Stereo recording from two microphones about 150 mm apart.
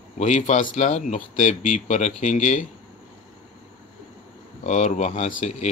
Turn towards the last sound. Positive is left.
turn(degrees=50)  # may be behind; listen again after turning